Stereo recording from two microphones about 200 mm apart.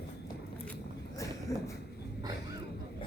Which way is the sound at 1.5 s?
15° left (ahead or behind).